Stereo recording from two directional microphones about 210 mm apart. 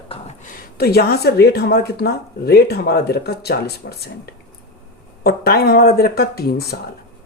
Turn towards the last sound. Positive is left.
turn(degrees=50)  # may be behind; listen again after turning